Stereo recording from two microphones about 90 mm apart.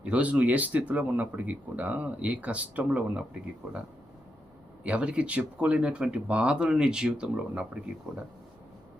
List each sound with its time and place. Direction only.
0.0 s speech: 15° right (ahead or behind)
4.8 s speech: 15° right (ahead or behind)